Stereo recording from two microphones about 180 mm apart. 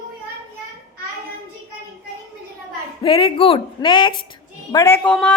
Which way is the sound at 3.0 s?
30° left (ahead or behind).